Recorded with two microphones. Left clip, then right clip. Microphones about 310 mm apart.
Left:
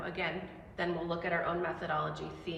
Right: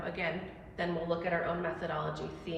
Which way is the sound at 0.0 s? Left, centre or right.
Centre.